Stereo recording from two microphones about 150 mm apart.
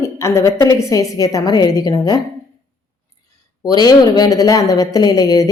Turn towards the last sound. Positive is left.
turn(degrees=25)  # may be behind; listen again after turning